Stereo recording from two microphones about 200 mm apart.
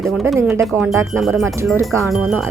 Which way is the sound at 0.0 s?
Centre (ahead or behind).